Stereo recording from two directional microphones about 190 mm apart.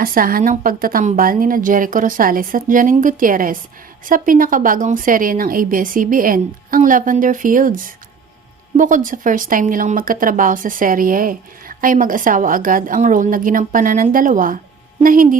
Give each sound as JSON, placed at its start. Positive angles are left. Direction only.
{"t": 0.0, "sound": "speech", "side_deg": -50}